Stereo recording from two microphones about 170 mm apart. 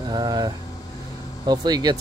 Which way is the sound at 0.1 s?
25° right (ahead or behind).